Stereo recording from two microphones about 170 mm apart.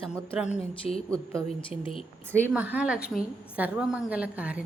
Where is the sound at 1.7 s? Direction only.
30° left (ahead or behind).